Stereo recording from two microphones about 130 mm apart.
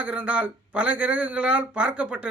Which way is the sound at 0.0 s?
10° right (ahead or behind).